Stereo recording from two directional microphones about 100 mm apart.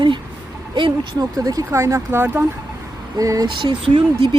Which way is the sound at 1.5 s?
35° right (ahead or behind).